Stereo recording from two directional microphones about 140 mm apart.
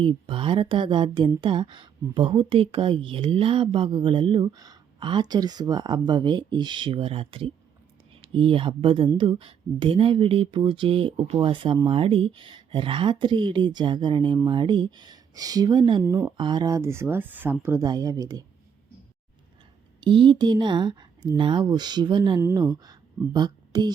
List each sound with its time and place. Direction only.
0.0 s a woman's voice: 35° right (ahead or behind)
16.0 s speech: 15° right (ahead or behind)
16.4 s speech: 30° right (ahead or behind); by 17.8 s 15° right (ahead or behind)
17.8 s speech: 25° right (ahead or behind)
20.0 s a woman's voice: 35° right (ahead or behind)
22.4 s speech: 15° right (ahead or behind)
22.8 s speech: 30° right (ahead or behind)